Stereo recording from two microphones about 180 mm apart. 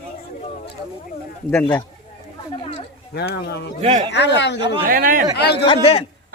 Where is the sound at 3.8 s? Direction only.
35° right (ahead or behind).